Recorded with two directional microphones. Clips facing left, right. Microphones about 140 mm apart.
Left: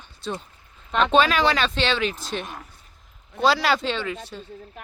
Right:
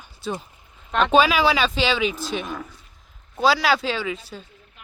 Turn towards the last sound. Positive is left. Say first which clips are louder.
# right 1 dB
turn(degrees=-5)  # may be behind; listen again after turning